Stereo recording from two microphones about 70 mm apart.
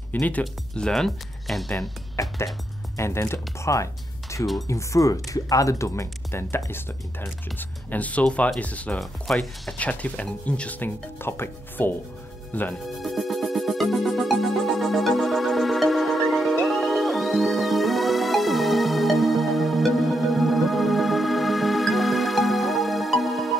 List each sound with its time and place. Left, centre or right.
0.1 s speech: left
0.4 s speech: centre
2.1 s speech: left
3.0 s speech: left; by 9.0 s centre
9.0 s speech: centre
9.8 s speech: left
10.8 s speech: left
12.8 s music: centre